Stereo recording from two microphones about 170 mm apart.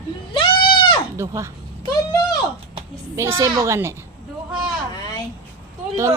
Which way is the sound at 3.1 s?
15° right (ahead or behind).